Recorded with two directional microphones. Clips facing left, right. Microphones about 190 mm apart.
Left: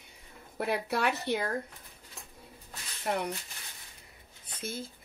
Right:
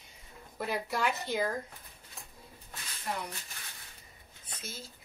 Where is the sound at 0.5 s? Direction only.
70° left (ahead or behind).